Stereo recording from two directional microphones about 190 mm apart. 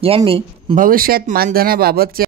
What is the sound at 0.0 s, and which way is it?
Speech, 30° right (ahead or behind).